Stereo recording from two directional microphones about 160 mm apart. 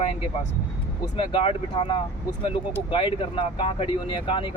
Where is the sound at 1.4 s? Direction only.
35° left (ahead or behind).